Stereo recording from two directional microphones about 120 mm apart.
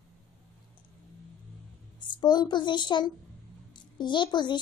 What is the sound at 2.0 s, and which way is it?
A woman's voice, 40° left (ahead or behind).